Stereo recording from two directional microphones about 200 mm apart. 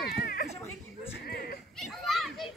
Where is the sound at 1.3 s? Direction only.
50° left (ahead or behind).